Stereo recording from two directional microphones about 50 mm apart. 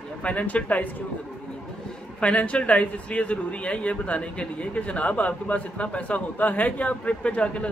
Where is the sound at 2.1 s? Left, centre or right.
Left.